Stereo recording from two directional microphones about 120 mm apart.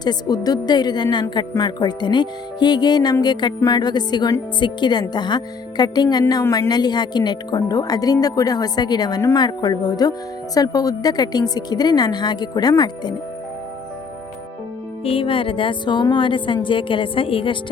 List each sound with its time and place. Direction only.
0.0 s speech: 35° left (ahead or behind)
15.0 s music: 50° left (ahead or behind)